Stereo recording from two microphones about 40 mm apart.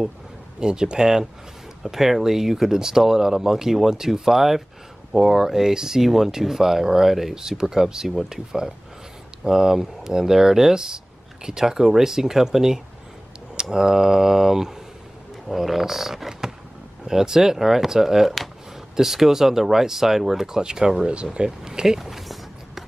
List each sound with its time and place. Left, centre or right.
0.6 s speech: centre
21.1 s speech: right
21.5 s a sound: centre